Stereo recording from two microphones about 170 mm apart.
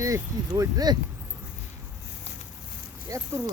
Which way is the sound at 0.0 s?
20° right (ahead or behind).